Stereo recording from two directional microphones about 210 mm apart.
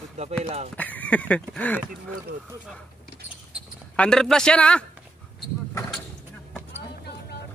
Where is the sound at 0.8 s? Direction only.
10° left (ahead or behind).